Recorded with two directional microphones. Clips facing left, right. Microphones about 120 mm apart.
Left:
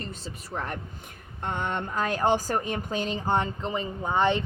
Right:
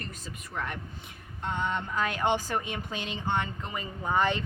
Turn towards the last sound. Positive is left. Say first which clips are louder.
# left 3 dB
turn(degrees=25)  # may be behind; listen again after turning